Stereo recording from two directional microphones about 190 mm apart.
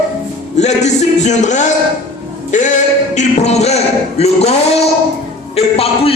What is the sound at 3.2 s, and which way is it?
Music, 35° left (ahead or behind).